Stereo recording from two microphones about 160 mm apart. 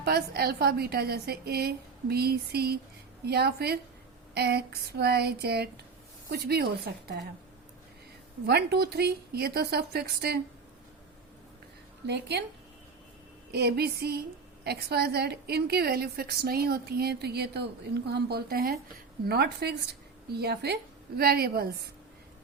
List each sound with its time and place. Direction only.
0.0 s a woman's voice: 75° right (ahead or behind)
8.4 s a woman's voice: 85° right
12.0 s speech: 90° right
13.5 s a woman's voice: 90° right
21.2 s a woman's voice: 75° right (ahead or behind)